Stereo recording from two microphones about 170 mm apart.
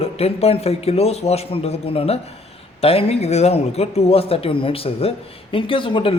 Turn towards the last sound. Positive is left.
turn(degrees=30)  # may be behind; listen again after turning